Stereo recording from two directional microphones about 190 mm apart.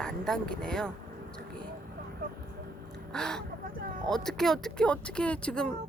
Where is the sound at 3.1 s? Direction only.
5° left (ahead or behind).